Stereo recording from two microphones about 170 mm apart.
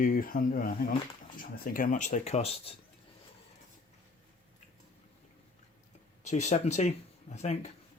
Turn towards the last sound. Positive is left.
turn(degrees=40)  # may be behind; listen again after turning